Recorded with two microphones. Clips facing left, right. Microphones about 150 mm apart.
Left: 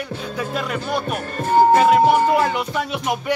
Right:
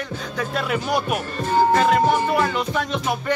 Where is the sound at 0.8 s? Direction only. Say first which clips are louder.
Right 1 dB; 10° right (ahead or behind).